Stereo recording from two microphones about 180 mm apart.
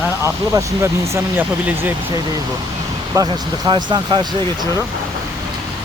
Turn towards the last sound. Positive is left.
turn(degrees=-25)  # may be behind; listen again after turning